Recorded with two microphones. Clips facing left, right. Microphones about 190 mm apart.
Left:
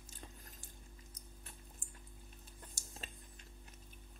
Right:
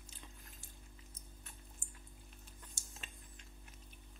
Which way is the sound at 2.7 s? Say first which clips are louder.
Left 5 dB; 40° left (ahead or behind).